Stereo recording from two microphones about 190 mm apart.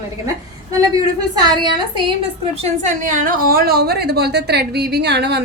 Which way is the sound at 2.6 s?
40° right (ahead or behind).